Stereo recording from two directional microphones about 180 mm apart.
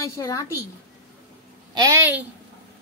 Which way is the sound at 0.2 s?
15° left (ahead or behind).